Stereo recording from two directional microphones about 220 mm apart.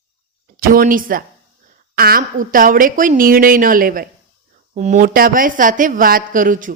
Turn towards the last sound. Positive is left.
turn(degrees=-40)  # may be behind; listen again after turning